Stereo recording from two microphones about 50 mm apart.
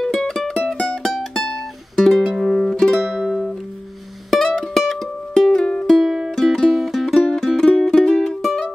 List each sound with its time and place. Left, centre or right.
0.0 s music: centre
5.5 s music: centre
6.0 s music: centre
6.3 s music: centre